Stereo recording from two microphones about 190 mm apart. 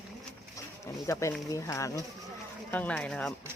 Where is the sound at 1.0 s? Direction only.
15° left (ahead or behind).